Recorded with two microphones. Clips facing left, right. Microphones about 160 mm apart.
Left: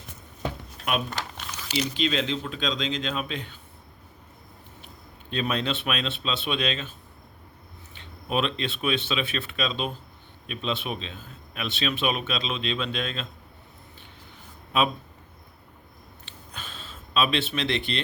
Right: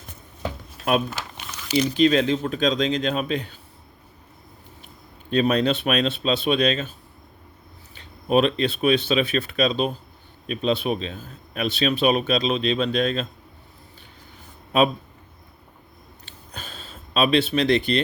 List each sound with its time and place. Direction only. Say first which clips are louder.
1.7 s speech: right 8 dB; 45° right (ahead or behind)
5.3 s a man's voice: right 8 dB; 40° right (ahead or behind)
7.9 s a man's voice: right 8 dB; 40° right (ahead or behind)
16.2 s a sound: right 3 dB; 40° right (ahead or behind)